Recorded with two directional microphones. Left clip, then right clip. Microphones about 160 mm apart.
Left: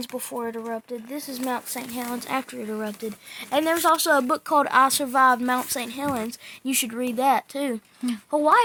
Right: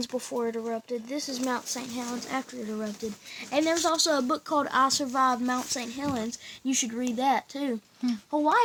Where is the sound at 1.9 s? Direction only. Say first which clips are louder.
Left 6 dB; 45° left (ahead or behind).